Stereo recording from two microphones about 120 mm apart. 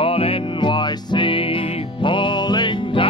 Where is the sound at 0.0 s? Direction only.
50° left (ahead or behind).